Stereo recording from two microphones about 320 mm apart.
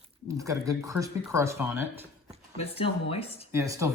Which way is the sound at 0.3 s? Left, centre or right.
Centre.